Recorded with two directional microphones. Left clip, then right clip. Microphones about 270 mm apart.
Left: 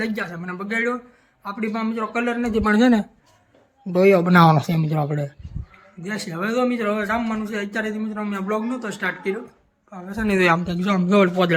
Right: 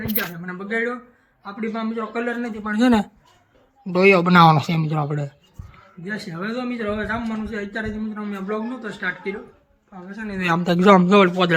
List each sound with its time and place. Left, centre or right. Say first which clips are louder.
0.4 s a man's voice: left 2 dB; centre
10.7 s a man's voice: right 8 dB; centre